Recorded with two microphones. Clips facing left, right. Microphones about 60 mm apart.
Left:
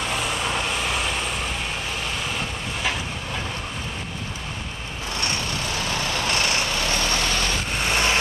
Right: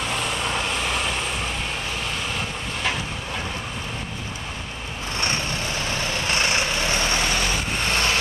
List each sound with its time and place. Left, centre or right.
0.0 s vehicle: centre
5.1 s vehicle: right; by 7.6 s centre
7.8 s vehicle: centre